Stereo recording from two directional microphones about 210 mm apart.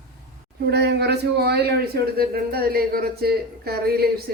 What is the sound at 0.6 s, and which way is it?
Speech, 50° right (ahead or behind).